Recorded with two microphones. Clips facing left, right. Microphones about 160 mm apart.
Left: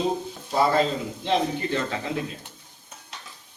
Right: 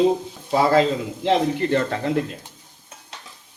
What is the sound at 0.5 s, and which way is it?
A man's voice, 90° right.